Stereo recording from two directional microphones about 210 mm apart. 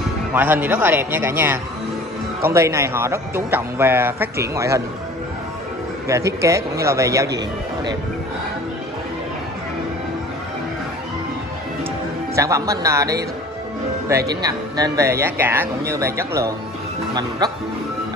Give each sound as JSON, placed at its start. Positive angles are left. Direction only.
{"t": 0.3, "sound": "a man's voice", "side_deg": -10}
{"t": 6.4, "sound": "a man's voice", "side_deg": -15}
{"t": 12.4, "sound": "a man's voice", "side_deg": -15}
{"t": 14.3, "sound": "a man's voice", "side_deg": -15}